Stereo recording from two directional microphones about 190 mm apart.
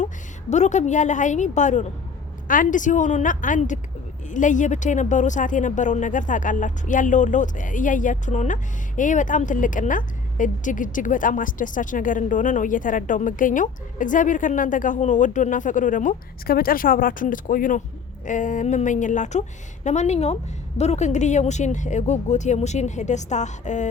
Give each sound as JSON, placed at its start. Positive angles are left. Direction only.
{"t": 0.5, "sound": "a woman's voice", "side_deg": 40}